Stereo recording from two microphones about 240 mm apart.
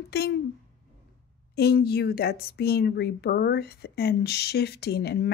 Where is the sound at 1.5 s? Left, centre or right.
Left.